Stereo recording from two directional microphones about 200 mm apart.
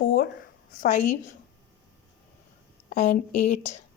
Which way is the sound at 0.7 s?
40° left (ahead or behind).